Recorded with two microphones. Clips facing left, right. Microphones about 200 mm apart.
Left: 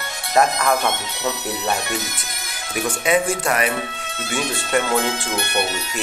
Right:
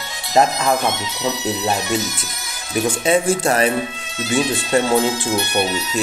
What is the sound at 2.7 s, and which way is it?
Speech, 30° right (ahead or behind).